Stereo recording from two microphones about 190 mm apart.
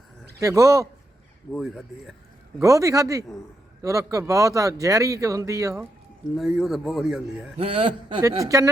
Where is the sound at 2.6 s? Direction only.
15° right (ahead or behind).